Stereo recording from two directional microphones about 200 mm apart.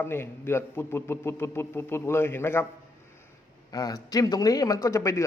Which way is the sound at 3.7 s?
20° left (ahead or behind).